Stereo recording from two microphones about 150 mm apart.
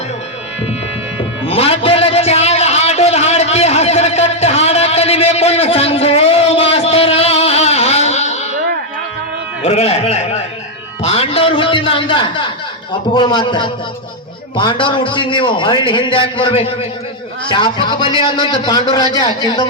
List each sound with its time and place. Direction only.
1.5 s a sound: 40° left (ahead or behind)
9.6 s a man's voice: 45° left (ahead or behind)
11.0 s music: 40° left (ahead or behind)
12.9 s a man's voice: 30° left (ahead or behind)